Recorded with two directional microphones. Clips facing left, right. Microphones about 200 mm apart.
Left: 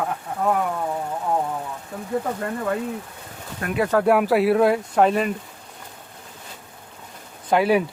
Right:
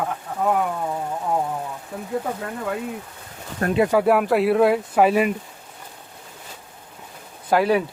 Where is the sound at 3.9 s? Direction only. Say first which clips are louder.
Left 4 dB; 5° right (ahead or behind).